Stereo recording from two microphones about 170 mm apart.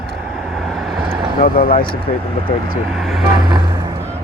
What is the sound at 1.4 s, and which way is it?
Speech, 55° left (ahead or behind).